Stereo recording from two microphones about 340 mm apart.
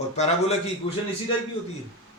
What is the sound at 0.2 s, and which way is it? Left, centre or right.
Speech, centre.